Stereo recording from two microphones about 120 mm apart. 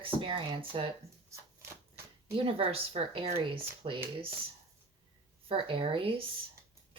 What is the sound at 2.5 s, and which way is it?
Speech, 55° right (ahead or behind).